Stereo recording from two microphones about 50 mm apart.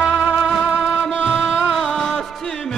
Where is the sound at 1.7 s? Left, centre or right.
Centre.